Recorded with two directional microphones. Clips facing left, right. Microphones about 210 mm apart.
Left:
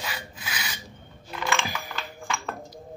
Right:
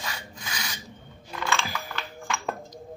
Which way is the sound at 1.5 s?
15° left (ahead or behind).